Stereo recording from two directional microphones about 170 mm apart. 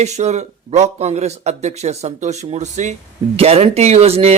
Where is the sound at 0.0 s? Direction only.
40° right (ahead or behind).